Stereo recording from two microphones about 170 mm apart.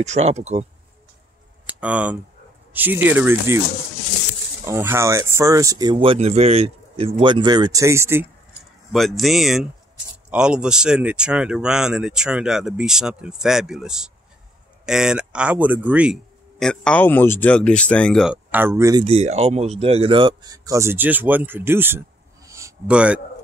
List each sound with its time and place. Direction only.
0.0 s speech: 40° right (ahead or behind)
1.8 s speech: 10° right (ahead or behind)
4.6 s speech: 15° right (ahead or behind)
8.9 s speech: centre (ahead or behind)
18.3 s speech: 10° right (ahead or behind)
19.0 s speech: 40° right (ahead or behind); by 22.8 s 20° right (ahead or behind)
22.8 s speech: 5° right (ahead or behind)